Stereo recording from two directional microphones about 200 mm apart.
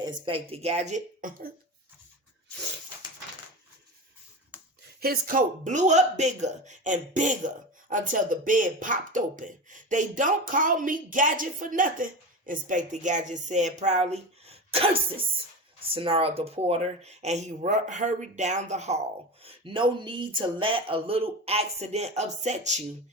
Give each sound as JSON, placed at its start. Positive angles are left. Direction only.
{"t": 0.0, "sound": "speech", "side_deg": -25}
{"t": 4.9, "sound": "speech", "side_deg": -45}